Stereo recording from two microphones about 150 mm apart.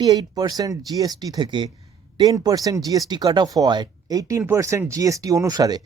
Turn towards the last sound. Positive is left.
turn(degrees=-25)  # may be behind; listen again after turning